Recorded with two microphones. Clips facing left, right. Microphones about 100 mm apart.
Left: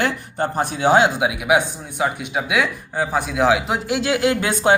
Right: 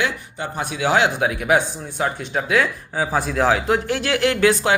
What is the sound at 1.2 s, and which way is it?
Speech, 10° left (ahead or behind).